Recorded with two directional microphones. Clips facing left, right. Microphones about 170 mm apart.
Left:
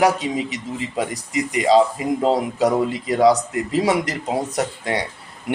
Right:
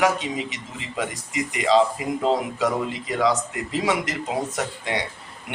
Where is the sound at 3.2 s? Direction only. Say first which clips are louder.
Left 7 dB; 35° left (ahead or behind).